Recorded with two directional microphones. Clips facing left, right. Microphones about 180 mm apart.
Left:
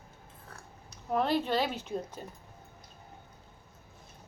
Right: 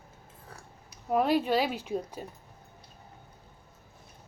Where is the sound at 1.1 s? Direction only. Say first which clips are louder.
Right 3 dB; 10° right (ahead or behind).